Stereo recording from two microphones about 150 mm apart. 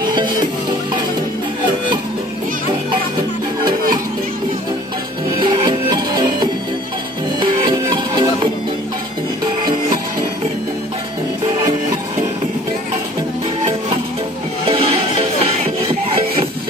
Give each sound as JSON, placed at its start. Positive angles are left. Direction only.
{"t": 5.4, "sound": "music", "side_deg": -30}
{"t": 14.7, "sound": "music", "side_deg": -40}